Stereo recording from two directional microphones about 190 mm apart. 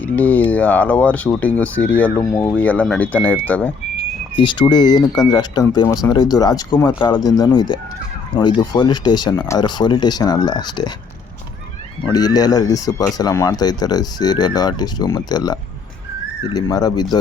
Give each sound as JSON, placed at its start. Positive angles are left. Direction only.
{"t": 0.0, "sound": "speech", "side_deg": 10}
{"t": 4.4, "sound": "speech", "side_deg": 25}
{"t": 12.1, "sound": "speech", "side_deg": 20}